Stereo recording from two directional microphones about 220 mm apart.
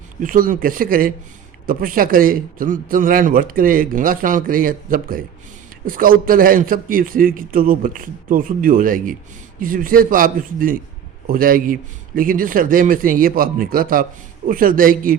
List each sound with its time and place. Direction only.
0.2 s a man's voice: 40° right (ahead or behind)